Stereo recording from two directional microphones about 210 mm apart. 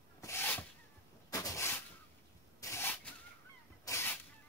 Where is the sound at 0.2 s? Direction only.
10° left (ahead or behind).